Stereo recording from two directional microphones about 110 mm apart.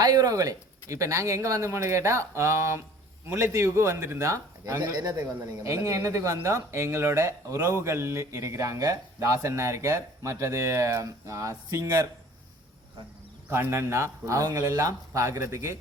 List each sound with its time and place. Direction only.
0.0 s speech: 35° right (ahead or behind)
13.5 s speech: 25° right (ahead or behind)